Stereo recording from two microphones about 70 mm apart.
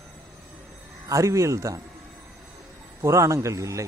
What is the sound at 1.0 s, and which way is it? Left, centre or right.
Speech, right.